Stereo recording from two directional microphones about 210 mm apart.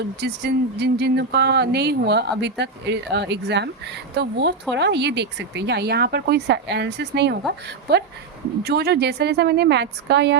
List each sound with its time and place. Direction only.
0.0 s speech: 50° right (ahead or behind)